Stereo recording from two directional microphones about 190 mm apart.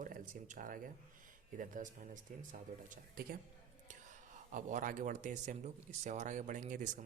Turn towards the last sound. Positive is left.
turn(degrees=-45)  # may be behind; listen again after turning